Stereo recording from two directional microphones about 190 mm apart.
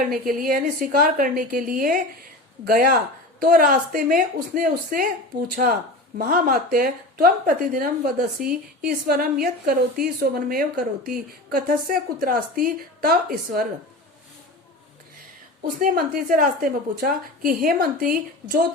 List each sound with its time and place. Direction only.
0.0 s speech: 45° right (ahead or behind)
15.8 s speech: 50° right (ahead or behind)